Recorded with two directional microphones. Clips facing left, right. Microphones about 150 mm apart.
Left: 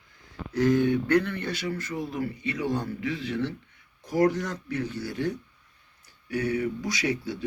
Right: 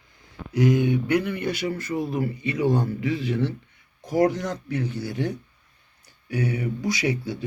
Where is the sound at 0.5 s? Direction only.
15° right (ahead or behind).